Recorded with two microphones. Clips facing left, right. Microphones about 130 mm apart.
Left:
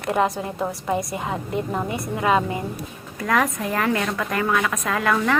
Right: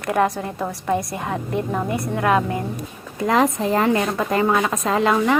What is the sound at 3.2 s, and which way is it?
A woman's voice, 25° right (ahead or behind).